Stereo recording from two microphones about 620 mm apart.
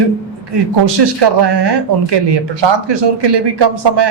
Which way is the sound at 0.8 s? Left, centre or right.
Right.